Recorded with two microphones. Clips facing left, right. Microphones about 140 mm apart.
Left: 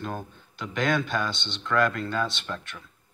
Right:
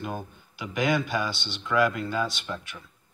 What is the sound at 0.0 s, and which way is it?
Speech, 5° right (ahead or behind).